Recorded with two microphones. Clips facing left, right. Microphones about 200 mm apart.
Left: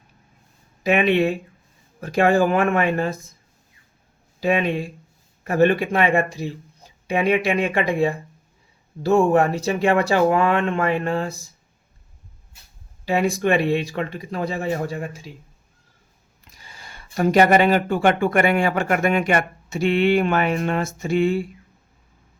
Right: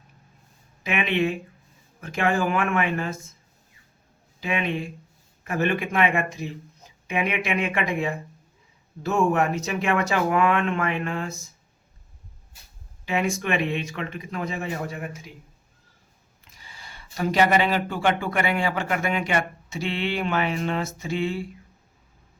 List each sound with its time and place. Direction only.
0.9 s speech: 40° left (ahead or behind)
4.4 s speech: 40° left (ahead or behind)
13.1 s speech: 35° left (ahead or behind)
16.4 s speech: 45° left (ahead or behind)